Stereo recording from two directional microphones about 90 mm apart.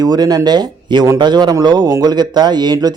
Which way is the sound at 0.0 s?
45° right (ahead or behind).